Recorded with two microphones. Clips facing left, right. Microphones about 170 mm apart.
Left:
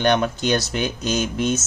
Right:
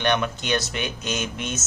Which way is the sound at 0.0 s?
35° left (ahead or behind).